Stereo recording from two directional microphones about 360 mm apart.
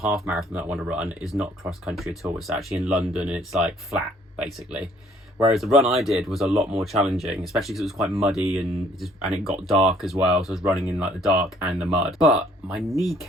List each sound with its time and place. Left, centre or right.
0.0 s speech: centre
6.4 s speech: centre
6.7 s speech: centre